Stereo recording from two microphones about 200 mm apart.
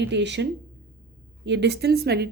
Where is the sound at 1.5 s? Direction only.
60° right (ahead or behind).